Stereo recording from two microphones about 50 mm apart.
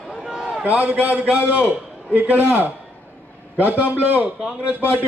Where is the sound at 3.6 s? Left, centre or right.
Right.